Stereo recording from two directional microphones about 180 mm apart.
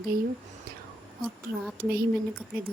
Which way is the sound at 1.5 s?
65° right (ahead or behind).